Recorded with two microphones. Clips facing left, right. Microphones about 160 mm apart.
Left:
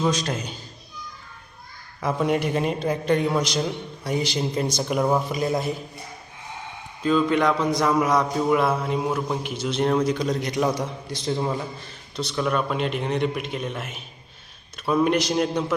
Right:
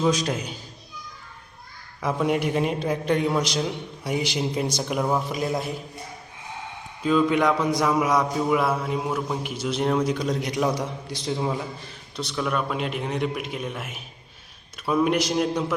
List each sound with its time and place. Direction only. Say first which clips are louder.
0.0 s a man's voice: right 1 dB; 5° right (ahead or behind)
2.0 s a man's voice: left 1 dB; centre (ahead or behind)
7.0 s a man's voice: even; 5° right (ahead or behind)